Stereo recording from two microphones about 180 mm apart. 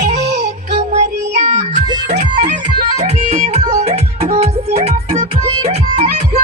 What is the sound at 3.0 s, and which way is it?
Music, 35° right (ahead or behind).